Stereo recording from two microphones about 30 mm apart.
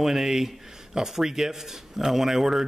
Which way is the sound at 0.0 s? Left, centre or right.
Centre.